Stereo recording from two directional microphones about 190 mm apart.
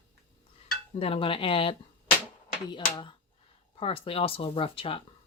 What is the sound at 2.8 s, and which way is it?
Speech, 20° left (ahead or behind).